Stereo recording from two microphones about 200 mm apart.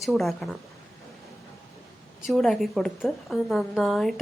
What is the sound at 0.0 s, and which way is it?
Speech, centre (ahead or behind).